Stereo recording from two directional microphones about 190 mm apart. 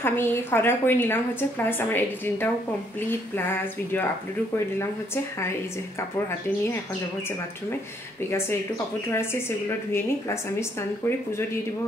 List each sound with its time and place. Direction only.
0.0 s a woman's voice: 10° left (ahead or behind)
8.3 s a woman's voice: 15° left (ahead or behind)